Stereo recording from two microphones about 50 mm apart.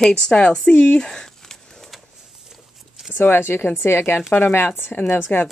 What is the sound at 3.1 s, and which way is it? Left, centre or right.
Speech, left.